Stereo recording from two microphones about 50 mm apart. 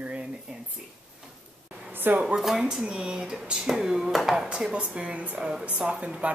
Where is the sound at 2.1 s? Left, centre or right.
Right.